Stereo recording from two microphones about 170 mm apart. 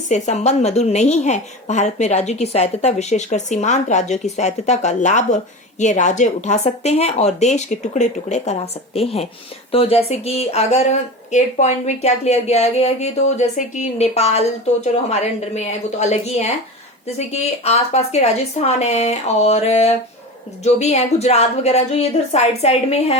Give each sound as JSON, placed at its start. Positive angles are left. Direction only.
{"t": 0.1, "sound": "a woman's voice", "side_deg": 40}